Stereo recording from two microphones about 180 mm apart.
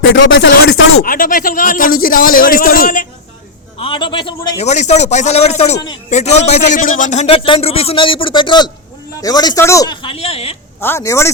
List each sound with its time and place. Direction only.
0.0 s speech: 90° left
1.0 s a man's voice: 50° left (ahead or behind)
3.8 s a man's voice: 30° left (ahead or behind)
10.8 s speech: 15° left (ahead or behind)